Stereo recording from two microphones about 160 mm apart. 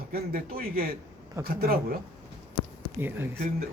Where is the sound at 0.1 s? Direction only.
65° right (ahead or behind).